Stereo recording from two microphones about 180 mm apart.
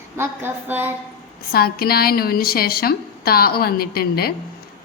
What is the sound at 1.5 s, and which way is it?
A woman's voice, 55° left (ahead or behind).